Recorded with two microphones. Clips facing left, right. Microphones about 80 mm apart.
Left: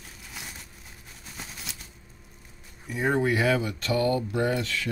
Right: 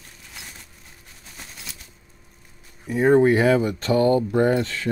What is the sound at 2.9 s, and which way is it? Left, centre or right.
Speech, right.